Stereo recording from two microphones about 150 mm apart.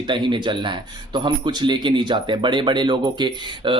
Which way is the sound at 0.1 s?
30° right (ahead or behind).